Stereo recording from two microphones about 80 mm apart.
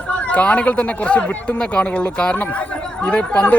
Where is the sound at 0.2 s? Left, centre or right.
Centre.